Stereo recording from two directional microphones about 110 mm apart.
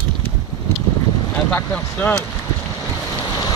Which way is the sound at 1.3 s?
15° left (ahead or behind).